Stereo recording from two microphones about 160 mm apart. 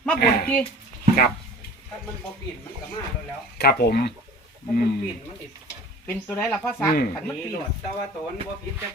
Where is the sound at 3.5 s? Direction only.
85° left.